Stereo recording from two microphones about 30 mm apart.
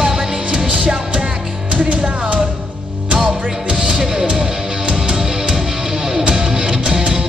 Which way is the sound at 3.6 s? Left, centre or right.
Right.